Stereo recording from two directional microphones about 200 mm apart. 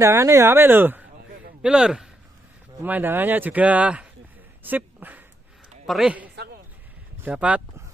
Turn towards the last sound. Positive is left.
turn(degrees=-5)  # may be behind; listen again after turning